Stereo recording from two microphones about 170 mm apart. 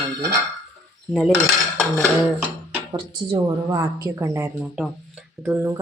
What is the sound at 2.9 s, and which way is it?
A woman's voice, 20° right (ahead or behind).